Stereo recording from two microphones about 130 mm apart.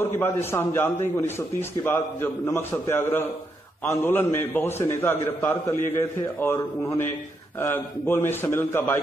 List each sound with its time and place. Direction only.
0.0 s a man's voice: 15° left (ahead or behind)